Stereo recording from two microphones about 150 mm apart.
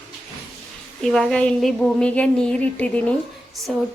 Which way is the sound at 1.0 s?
5° left (ahead or behind).